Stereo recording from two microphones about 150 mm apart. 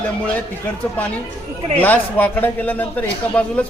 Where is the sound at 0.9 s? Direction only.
10° left (ahead or behind).